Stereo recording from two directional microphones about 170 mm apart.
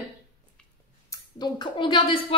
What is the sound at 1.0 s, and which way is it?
A woman's voice, 20° left (ahead or behind).